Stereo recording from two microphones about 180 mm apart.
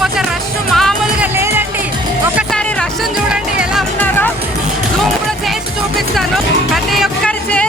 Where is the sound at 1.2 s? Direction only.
15° right (ahead or behind).